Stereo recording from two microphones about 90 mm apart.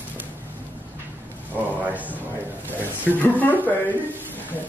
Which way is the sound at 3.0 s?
20° left (ahead or behind).